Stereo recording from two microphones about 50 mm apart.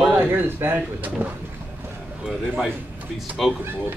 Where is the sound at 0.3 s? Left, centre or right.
Right.